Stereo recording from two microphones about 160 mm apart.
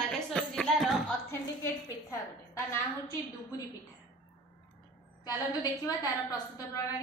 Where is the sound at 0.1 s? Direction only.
5° left (ahead or behind).